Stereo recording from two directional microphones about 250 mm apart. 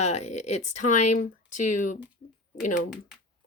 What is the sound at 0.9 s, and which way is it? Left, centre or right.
Speech, left.